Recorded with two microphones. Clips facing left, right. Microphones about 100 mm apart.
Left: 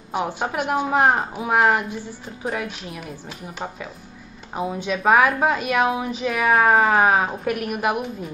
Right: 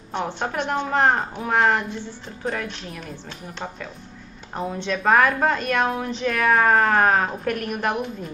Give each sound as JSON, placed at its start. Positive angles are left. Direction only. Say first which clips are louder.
{"t": 0.1, "sound": "a woman's voice", "louder": "left 2 dB", "side_deg": 10}